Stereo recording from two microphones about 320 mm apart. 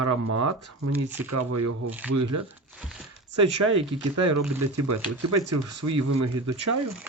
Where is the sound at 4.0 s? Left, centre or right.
Right.